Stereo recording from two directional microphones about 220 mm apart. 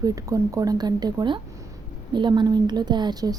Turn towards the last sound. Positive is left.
turn(degrees=-20)  # may be behind; listen again after turning